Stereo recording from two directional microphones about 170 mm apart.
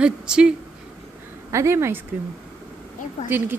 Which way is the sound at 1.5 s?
15° right (ahead or behind).